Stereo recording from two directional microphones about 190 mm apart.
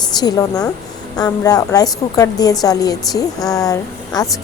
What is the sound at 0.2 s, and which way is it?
A woman's voice, 20° left (ahead or behind).